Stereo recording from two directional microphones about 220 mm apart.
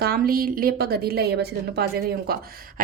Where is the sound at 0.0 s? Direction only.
45° right (ahead or behind).